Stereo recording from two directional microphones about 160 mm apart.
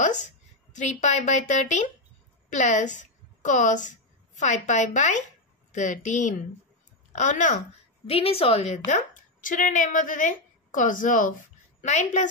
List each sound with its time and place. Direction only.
0.0 s a sound: 50° left (ahead or behind)
0.7 s a woman's voice: 50° left (ahead or behind)
8.1 s a woman's voice: 40° left (ahead or behind)